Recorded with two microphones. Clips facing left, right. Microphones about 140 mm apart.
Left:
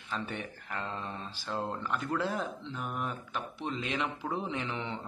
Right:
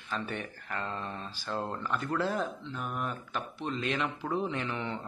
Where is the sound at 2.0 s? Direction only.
Centre (ahead or behind).